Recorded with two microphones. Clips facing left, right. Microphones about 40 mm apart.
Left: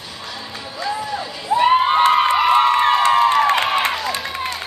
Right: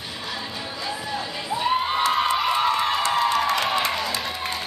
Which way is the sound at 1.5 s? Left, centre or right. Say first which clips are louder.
Left 9 dB; left.